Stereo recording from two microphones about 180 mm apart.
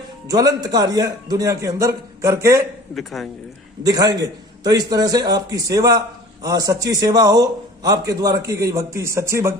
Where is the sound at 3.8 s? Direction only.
20° right (ahead or behind).